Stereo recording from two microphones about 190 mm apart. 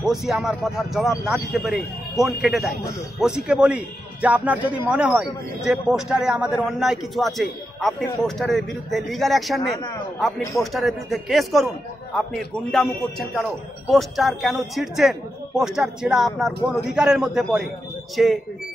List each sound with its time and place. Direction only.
0.0 s speech: centre (ahead or behind)
9.6 s speech: 20° left (ahead or behind)
10.6 s speech: centre (ahead or behind)